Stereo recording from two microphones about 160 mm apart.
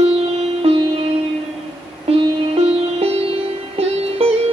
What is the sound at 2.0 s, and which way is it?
Music, 40° right (ahead or behind).